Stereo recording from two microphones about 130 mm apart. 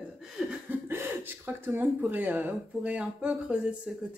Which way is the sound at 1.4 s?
15° right (ahead or behind).